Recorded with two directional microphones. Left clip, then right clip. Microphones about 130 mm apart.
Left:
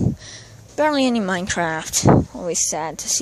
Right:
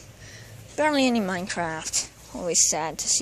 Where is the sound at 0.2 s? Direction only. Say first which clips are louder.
Left 6 dB; 25° left (ahead or behind).